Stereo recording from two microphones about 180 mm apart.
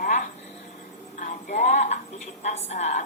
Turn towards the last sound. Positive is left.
turn(degrees=40)  # may be behind; listen again after turning